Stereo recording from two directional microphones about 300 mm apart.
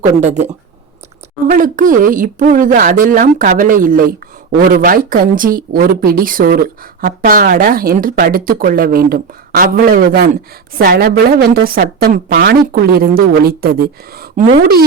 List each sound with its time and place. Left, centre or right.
0.0 s a woman's voice: right